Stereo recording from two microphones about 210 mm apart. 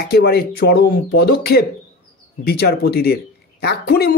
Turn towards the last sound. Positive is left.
turn(degrees=50)  # may be behind; listen again after turning